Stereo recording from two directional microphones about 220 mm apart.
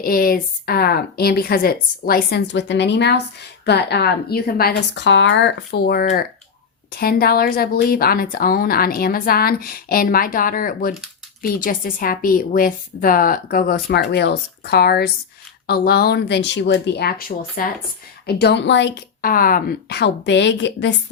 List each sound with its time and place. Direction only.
0.0 s a woman's voice: 40° left (ahead or behind)